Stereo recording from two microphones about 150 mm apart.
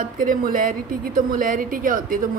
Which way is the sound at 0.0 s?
65° right (ahead or behind).